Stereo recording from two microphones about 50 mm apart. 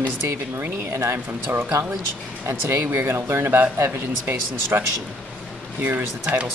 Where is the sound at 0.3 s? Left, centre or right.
Right.